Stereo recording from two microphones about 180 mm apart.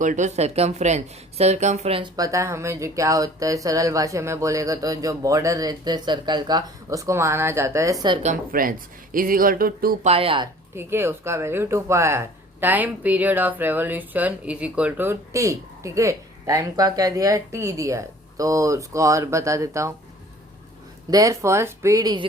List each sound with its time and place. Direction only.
0.0 s speech: 45° right (ahead or behind)
2.1 s speech: 20° right (ahead or behind)
8.2 s speech: 45° right (ahead or behind)
10.1 s speech: 30° right (ahead or behind)
10.8 s speech: 15° right (ahead or behind)
21.1 s speech: 20° right (ahead or behind)